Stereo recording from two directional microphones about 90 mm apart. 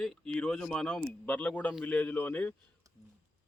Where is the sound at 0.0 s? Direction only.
5° left (ahead or behind).